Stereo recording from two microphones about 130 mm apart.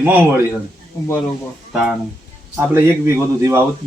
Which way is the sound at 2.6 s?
20° right (ahead or behind).